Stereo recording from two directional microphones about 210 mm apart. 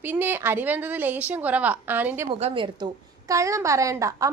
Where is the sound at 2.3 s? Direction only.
25° right (ahead or behind).